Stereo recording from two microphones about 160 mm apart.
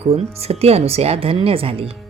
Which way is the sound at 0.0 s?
40° right (ahead or behind).